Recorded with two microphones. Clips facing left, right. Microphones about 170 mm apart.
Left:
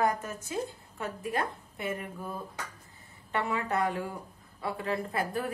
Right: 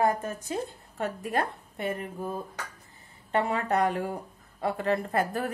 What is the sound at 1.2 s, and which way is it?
Speech, 40° right (ahead or behind).